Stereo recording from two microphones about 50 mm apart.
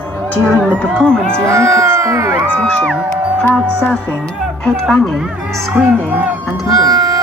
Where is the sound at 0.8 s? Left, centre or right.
Centre.